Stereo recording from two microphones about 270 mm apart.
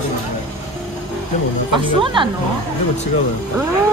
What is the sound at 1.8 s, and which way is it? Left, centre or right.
Speech, centre.